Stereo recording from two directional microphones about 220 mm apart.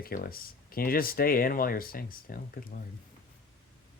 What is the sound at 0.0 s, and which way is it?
Speech, 40° left (ahead or behind).